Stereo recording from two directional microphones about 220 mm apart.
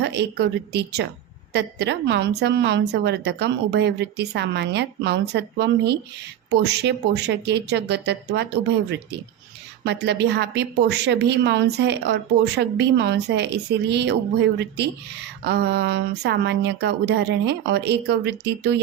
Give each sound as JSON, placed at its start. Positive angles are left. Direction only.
{"t": 0.0, "sound": "speech", "side_deg": -50}
{"t": 9.8, "sound": "speech", "side_deg": -50}
{"t": 15.4, "sound": "speech", "side_deg": -50}